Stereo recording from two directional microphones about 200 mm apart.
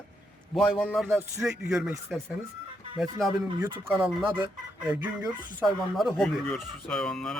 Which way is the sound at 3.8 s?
5° right (ahead or behind).